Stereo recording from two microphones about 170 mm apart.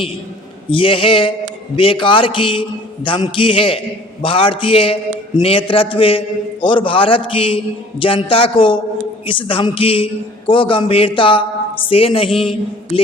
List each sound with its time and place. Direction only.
0.7 s a man's voice: 30° left (ahead or behind)